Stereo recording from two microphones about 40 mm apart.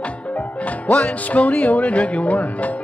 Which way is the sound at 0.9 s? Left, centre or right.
Left.